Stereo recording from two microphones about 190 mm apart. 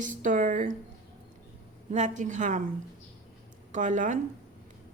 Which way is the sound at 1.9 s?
40° right (ahead or behind).